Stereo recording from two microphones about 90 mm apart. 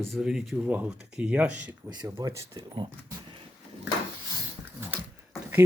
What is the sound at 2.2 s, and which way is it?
Speech, 45° right (ahead or behind).